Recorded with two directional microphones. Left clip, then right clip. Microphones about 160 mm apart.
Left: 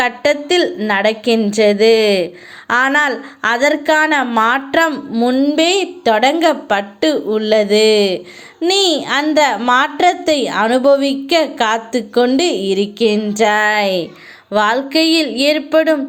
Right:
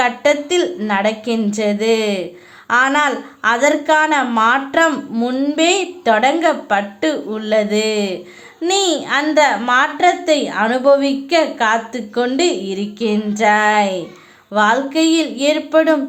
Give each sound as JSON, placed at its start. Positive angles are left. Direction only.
{"t": 0.0, "sound": "a woman's voice", "side_deg": 25}
{"t": 5.5, "sound": "a woman's voice", "side_deg": 25}